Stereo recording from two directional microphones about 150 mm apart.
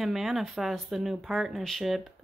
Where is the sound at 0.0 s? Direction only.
Centre (ahead or behind).